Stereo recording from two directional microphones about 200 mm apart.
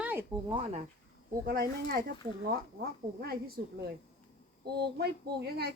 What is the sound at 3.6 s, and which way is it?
Speech, 50° right (ahead or behind).